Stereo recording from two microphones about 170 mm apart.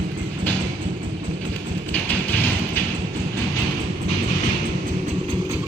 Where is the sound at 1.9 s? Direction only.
10° left (ahead or behind).